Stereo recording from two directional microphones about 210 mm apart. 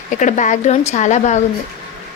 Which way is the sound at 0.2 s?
35° left (ahead or behind).